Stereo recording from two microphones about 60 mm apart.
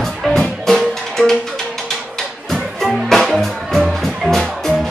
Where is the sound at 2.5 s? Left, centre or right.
Centre.